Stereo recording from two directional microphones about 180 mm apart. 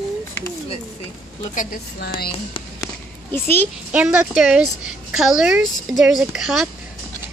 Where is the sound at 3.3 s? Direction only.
10° left (ahead or behind).